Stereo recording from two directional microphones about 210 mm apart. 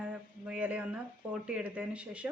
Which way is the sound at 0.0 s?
5° right (ahead or behind).